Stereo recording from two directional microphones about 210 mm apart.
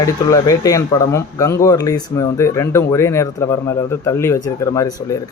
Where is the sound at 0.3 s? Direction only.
15° left (ahead or behind).